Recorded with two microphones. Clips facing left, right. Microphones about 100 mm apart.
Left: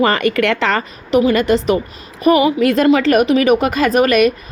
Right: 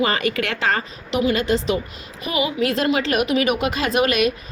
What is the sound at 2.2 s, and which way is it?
A woman's voice, 45° left (ahead or behind).